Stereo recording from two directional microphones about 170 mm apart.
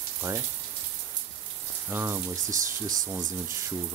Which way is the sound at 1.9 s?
15° right (ahead or behind).